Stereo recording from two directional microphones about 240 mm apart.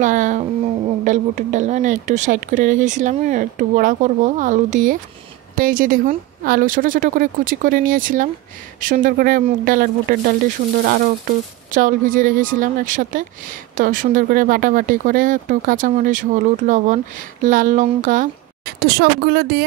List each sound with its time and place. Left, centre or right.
0.0 s speech: right